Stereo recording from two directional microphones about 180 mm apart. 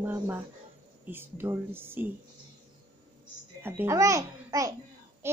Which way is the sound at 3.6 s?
15° right (ahead or behind).